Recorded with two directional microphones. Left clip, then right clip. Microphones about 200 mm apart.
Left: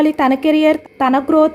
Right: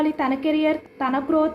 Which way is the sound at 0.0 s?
60° left (ahead or behind).